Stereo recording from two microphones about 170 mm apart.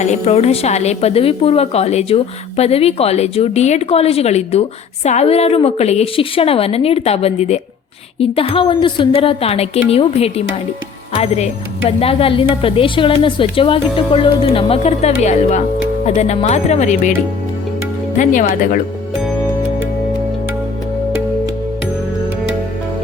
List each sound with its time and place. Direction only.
0.0 s a woman's voice: 40° left (ahead or behind)
18.2 s speech: 50° left (ahead or behind)